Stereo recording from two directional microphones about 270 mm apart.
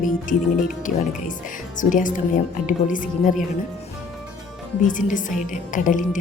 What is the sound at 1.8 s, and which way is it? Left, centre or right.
A woman's voice, left.